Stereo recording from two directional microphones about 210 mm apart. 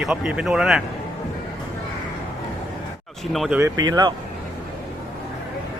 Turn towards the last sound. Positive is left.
turn(degrees=-20)  # may be behind; listen again after turning